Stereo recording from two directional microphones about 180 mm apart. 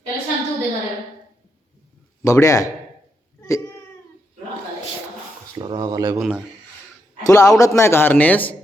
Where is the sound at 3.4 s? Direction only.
20° left (ahead or behind).